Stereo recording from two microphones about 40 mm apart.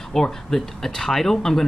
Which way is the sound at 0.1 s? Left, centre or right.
Centre.